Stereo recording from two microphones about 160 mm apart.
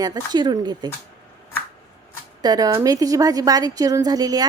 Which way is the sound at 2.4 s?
25° right (ahead or behind).